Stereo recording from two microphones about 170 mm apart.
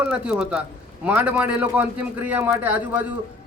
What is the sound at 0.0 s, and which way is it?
A man's voice, 5° right (ahead or behind).